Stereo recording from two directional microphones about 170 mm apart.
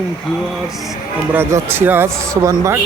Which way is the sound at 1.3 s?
15° right (ahead or behind).